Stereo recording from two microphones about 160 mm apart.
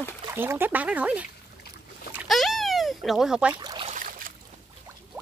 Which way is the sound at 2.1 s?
Centre (ahead or behind).